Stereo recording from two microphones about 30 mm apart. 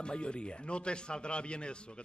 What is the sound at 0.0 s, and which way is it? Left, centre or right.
Speech, left.